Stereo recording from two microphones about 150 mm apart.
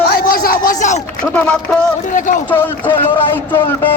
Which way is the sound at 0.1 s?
85° left.